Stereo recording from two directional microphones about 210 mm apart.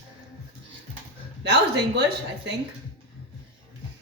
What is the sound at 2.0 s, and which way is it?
Speech, 55° right (ahead or behind).